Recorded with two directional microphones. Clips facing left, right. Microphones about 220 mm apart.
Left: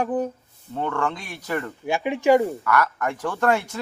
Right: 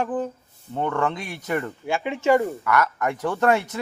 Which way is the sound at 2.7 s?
20° right (ahead or behind).